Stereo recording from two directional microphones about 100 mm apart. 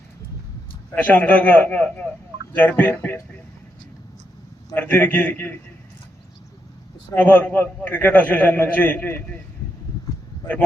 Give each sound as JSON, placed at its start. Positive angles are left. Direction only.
{"t": 0.9, "sound": "a man's voice", "side_deg": 15}
{"t": 4.7, "sound": "a man's voice", "side_deg": 15}
{"t": 7.1, "sound": "a man's voice", "side_deg": 20}